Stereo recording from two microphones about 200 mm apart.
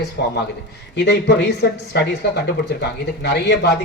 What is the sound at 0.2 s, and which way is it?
A man's voice, 55° left (ahead or behind).